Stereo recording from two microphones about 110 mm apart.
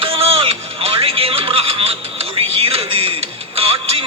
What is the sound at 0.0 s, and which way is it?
Music, 60° right (ahead or behind).